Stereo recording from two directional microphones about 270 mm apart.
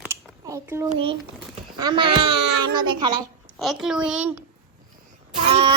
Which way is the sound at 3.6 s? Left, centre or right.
Centre.